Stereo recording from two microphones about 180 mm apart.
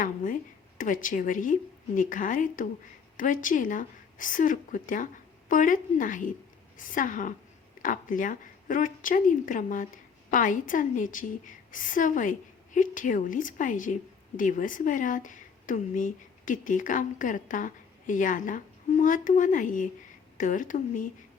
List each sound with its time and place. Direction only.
0.8 s speech: 45° left (ahead or behind)